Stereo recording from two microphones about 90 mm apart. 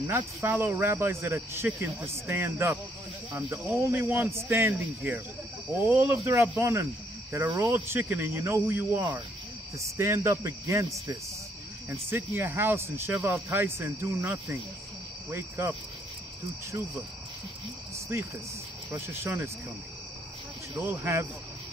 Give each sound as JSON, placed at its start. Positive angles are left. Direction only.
{"t": 0.0, "sound": "speech", "side_deg": -25}
{"t": 9.8, "sound": "speech", "side_deg": -30}
{"t": 18.1, "sound": "speech", "side_deg": -30}
{"t": 20.8, "sound": "speech", "side_deg": -25}